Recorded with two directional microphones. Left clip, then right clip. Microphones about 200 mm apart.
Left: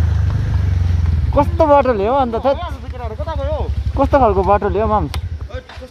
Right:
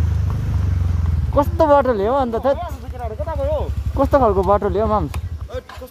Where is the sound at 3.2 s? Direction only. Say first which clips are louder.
Right 1 dB; 45° right (ahead or behind).